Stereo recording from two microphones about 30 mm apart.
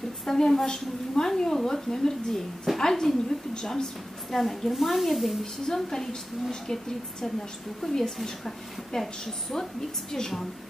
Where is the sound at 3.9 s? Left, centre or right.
Centre.